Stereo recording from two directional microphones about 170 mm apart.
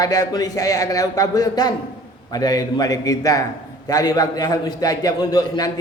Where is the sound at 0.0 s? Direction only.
20° left (ahead or behind).